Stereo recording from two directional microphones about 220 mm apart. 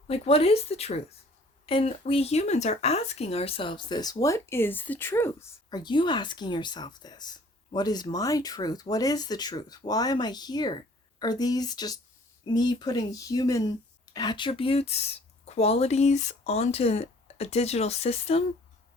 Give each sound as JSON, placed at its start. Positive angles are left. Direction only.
{"t": 0.1, "sound": "speech", "side_deg": 25}